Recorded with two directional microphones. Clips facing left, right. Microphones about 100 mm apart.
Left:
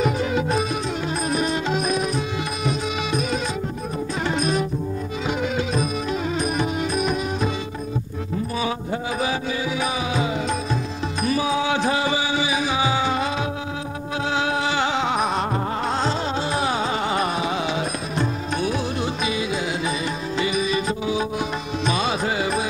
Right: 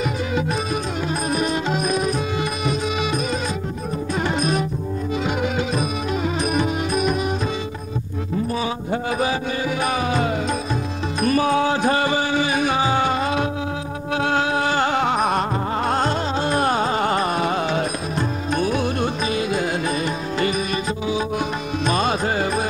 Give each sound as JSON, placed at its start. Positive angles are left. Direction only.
{"t": 9.8, "sound": "music", "side_deg": -55}
{"t": 14.1, "sound": "music", "side_deg": -55}
{"t": 15.9, "sound": "carnatic music", "side_deg": -50}
{"t": 18.6, "sound": "music", "side_deg": -45}
{"t": 21.8, "sound": "music", "side_deg": -45}